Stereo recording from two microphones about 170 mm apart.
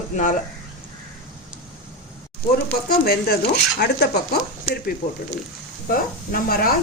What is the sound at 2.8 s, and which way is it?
Speech, 70° left (ahead or behind).